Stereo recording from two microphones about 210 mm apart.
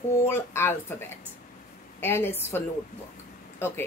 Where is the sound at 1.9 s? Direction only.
10° left (ahead or behind).